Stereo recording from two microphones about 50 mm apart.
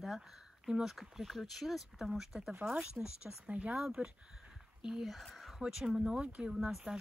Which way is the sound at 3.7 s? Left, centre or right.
Centre.